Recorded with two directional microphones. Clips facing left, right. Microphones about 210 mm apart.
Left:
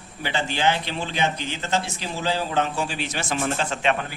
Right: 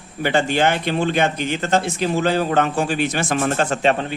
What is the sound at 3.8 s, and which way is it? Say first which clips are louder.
Speech: right 4 dB; 35° right (ahead or behind).